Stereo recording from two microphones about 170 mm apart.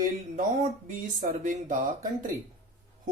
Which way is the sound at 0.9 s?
50° right (ahead or behind).